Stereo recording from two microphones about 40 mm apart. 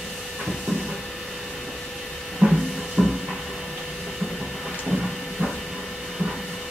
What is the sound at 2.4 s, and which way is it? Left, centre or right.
Music, centre.